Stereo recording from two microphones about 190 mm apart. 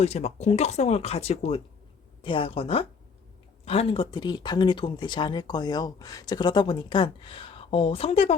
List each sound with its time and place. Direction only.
0.0 s speech: 35° left (ahead or behind)